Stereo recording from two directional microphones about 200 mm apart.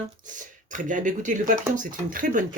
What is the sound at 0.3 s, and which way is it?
Speech, 40° right (ahead or behind).